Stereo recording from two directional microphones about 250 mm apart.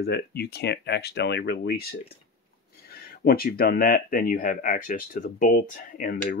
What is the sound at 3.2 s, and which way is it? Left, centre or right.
Speech, left.